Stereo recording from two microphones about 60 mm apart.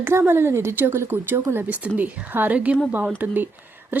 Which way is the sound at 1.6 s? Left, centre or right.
Right.